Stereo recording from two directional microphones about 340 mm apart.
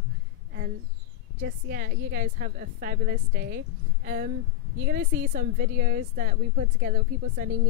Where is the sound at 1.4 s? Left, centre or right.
Right.